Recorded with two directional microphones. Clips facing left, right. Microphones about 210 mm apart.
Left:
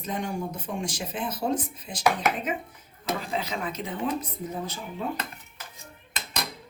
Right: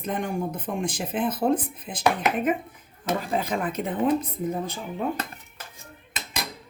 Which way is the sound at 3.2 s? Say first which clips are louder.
Right 7 dB; 50° right (ahead or behind).